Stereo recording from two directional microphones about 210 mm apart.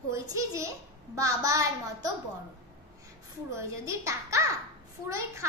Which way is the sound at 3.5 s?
15° right (ahead or behind).